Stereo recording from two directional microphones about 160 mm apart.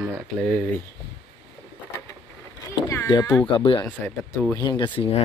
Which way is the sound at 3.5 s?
35° left (ahead or behind).